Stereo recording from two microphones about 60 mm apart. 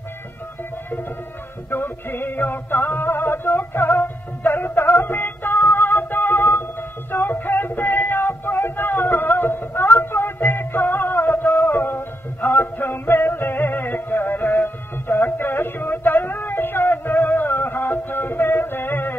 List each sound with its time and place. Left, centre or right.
1.7 s music: left